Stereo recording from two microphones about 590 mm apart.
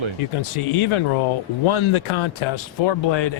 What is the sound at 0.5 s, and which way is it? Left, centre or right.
Speech, left.